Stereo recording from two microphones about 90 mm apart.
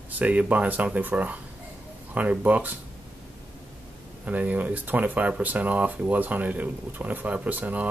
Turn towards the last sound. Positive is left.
turn(degrees=-20)  # may be behind; listen again after turning